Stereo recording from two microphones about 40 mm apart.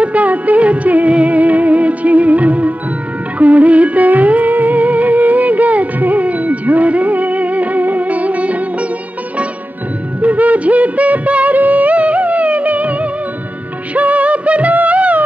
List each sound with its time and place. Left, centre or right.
0.0 s music of bollywood: right
1.1 s music: right
10.2 s music: right